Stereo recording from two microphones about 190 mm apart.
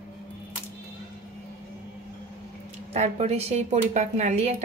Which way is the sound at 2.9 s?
35° right (ahead or behind).